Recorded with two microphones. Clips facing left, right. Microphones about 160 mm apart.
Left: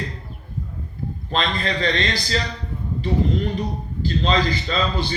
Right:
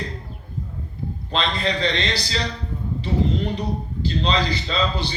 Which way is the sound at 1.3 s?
45° left (ahead or behind).